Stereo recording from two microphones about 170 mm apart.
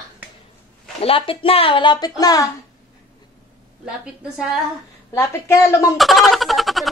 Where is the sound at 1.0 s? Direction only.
30° left (ahead or behind).